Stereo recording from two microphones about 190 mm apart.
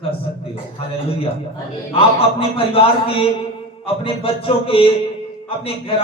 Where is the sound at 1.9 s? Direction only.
30° left (ahead or behind).